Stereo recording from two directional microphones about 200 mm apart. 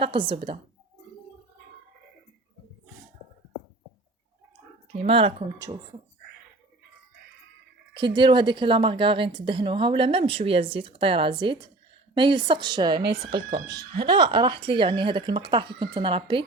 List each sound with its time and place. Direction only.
0.0 s a woman's voice: 25° right (ahead or behind)
4.9 s a woman's voice: 25° right (ahead or behind)
7.9 s a woman's voice: 25° right (ahead or behind)
14.0 s a woman's voice: 20° right (ahead or behind)